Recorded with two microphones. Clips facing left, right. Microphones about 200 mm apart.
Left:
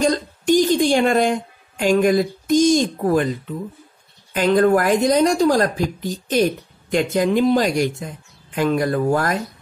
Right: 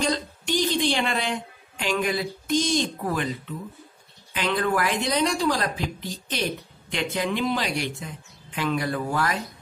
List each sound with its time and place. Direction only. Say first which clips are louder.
0.0 s speech: left 7 dB; 45° left (ahead or behind)
4.3 s speech: left 10 dB; 45° left (ahead or behind)